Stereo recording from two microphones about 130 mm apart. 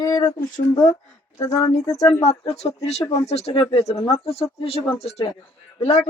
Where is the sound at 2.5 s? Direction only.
55° left (ahead or behind).